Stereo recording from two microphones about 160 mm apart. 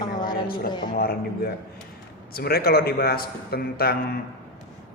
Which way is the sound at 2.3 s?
70° left (ahead or behind).